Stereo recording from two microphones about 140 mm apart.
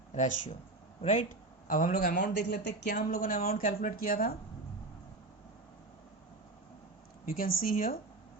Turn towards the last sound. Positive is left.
turn(degrees=90)